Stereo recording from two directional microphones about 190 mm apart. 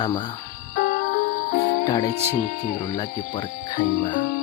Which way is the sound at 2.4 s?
45° left (ahead or behind).